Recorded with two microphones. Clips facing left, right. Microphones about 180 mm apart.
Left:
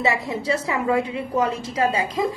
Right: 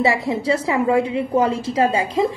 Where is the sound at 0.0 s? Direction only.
30° right (ahead or behind).